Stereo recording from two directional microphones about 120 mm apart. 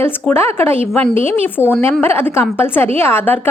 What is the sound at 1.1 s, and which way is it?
A woman's voice, 15° left (ahead or behind).